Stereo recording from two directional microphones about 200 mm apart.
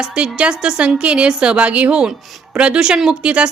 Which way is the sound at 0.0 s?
5° right (ahead or behind).